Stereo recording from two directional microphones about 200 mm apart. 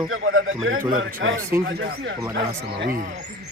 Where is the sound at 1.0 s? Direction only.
70° right (ahead or behind).